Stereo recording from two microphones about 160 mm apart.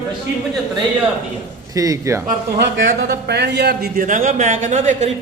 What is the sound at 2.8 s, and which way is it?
A man's voice, 85° right.